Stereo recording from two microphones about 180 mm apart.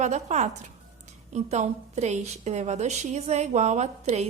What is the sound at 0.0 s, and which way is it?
A woman's voice, 40° right (ahead or behind).